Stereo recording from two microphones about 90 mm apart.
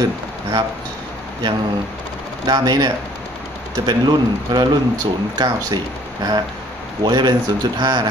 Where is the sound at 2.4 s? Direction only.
50° right (ahead or behind).